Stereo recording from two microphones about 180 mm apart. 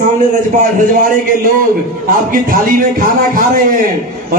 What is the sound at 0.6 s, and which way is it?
Speech, 50° right (ahead or behind).